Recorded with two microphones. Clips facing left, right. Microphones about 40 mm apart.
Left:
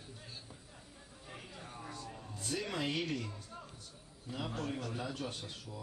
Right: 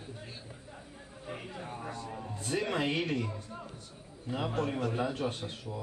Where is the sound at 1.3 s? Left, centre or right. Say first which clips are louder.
Right 8 dB; right.